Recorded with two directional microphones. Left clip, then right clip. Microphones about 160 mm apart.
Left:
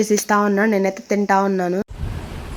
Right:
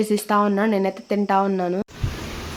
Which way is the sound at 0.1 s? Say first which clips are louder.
Left 3 dB; 15° left (ahead or behind).